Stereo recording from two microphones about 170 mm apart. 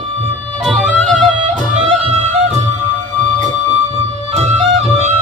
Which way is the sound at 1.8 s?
45° right (ahead or behind).